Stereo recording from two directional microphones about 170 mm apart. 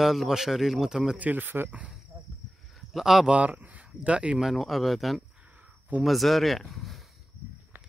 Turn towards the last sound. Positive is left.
turn(degrees=0)  # may be behind; listen again after turning